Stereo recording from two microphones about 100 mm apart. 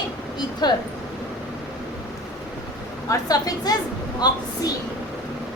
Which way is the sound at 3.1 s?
40° left (ahead or behind).